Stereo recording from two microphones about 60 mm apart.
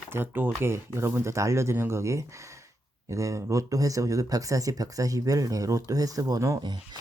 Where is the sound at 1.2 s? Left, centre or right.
Right.